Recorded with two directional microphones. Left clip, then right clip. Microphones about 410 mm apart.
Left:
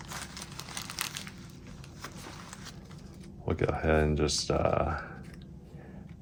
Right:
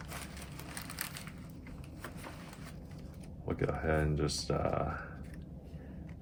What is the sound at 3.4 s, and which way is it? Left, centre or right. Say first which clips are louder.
Speech: left 5 dB; left.